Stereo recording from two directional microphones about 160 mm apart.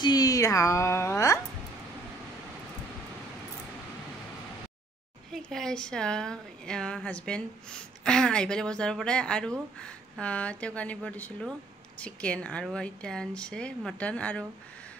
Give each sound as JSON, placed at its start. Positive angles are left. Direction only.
{"t": 0.0, "sound": "a woman's voice", "side_deg": 25}
{"t": 5.3, "sound": "a woman's voice", "side_deg": 5}